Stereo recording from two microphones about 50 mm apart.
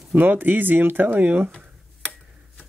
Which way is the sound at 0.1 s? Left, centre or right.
Right.